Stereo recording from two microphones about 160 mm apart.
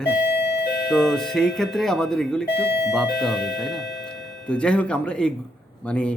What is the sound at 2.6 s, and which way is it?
Speech, 90° left.